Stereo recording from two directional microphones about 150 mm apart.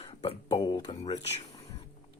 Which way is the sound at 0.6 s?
25° left (ahead or behind).